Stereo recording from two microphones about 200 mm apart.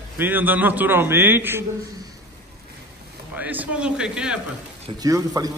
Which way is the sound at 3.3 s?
5° right (ahead or behind).